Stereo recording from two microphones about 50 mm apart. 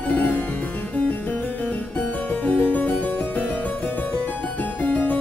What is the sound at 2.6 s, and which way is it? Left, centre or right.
Harpsichord, left.